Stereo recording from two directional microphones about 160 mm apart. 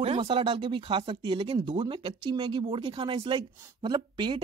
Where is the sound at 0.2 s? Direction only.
30° right (ahead or behind).